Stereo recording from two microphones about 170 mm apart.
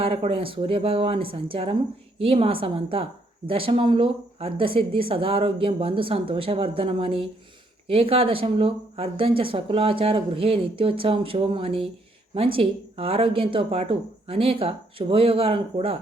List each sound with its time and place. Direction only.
0.0 s a woman's voice: 35° right (ahead or behind)